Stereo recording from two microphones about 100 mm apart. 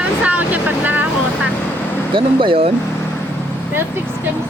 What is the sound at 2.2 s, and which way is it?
Speech, 60° right (ahead or behind).